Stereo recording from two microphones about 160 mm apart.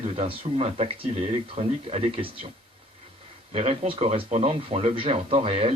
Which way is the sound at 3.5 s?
40° right (ahead or behind).